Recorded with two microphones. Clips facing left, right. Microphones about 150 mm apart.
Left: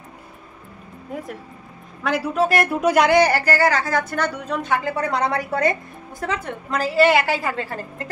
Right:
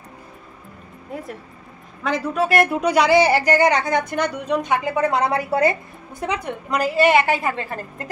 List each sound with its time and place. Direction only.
2.0 s speech: 5° left (ahead or behind)
3.2 s a woman's voice: 10° right (ahead or behind)
5.0 s a woman's voice: 30° right (ahead or behind)
6.2 s a woman's voice: 15° right (ahead or behind)